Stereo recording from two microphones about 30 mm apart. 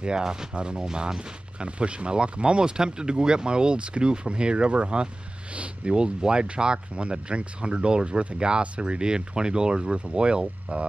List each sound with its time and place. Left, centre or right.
0.0 s speech: right